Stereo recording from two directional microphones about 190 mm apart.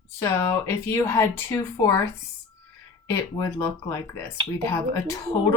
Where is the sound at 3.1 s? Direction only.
15° left (ahead or behind).